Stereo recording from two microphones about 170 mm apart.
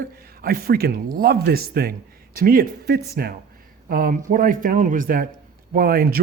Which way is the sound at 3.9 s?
55° right (ahead or behind).